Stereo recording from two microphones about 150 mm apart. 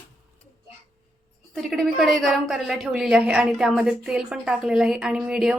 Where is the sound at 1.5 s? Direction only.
Centre (ahead or behind).